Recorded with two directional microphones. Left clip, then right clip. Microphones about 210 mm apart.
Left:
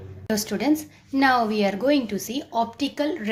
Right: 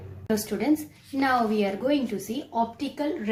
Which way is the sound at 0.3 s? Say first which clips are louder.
Left 2 dB; 30° left (ahead or behind).